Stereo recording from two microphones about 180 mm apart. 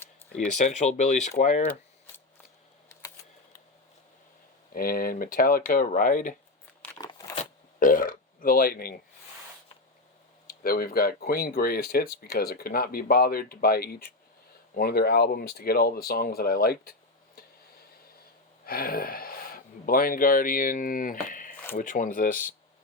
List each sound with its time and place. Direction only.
0.4 s speech: 40° left (ahead or behind)
4.7 s speech: 55° left (ahead or behind)
7.0 s a sound: 20° left (ahead or behind)
7.8 s speech: 50° left (ahead or behind)
10.4 s speech: 55° left (ahead or behind)
18.6 s speech: 55° left (ahead or behind)